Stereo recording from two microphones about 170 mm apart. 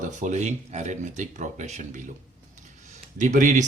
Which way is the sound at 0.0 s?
45° right (ahead or behind).